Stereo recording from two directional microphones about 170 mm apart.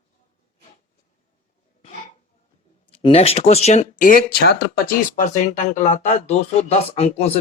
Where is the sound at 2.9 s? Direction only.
35° left (ahead or behind).